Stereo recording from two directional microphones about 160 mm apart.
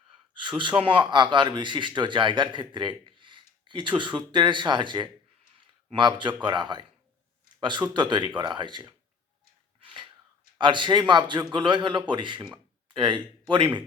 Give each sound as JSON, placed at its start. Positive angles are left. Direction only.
{"t": 0.4, "sound": "a man's voice", "side_deg": -30}
{"t": 9.8, "sound": "a sound", "side_deg": -30}
{"t": 10.6, "sound": "a man's voice", "side_deg": -30}